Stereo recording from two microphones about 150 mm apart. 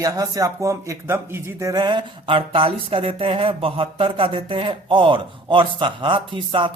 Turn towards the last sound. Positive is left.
turn(degrees=-35)  # may be behind; listen again after turning